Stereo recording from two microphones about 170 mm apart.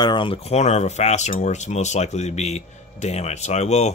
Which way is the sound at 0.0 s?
30° left (ahead or behind).